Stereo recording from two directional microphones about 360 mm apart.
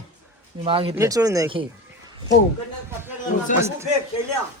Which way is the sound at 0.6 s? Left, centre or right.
Centre.